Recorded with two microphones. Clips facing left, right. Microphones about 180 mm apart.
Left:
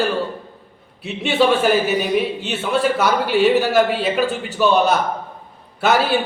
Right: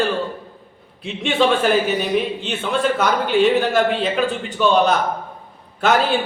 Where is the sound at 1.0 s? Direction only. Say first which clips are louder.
Left 1 dB; 5° left (ahead or behind).